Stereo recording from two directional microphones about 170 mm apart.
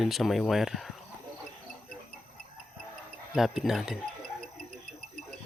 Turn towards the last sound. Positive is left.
turn(degrees=-45)  # may be behind; listen again after turning